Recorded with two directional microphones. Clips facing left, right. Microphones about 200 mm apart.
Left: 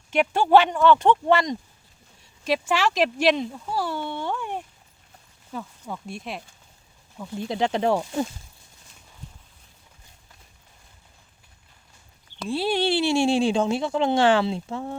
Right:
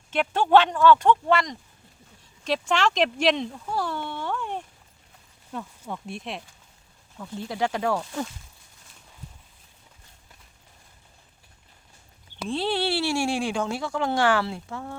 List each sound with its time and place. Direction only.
0.1 s speech: 10° left (ahead or behind)
2.4 s speech: 5° left (ahead or behind)
7.2 s speech: 20° left (ahead or behind)
12.5 s speech: 10° left (ahead or behind)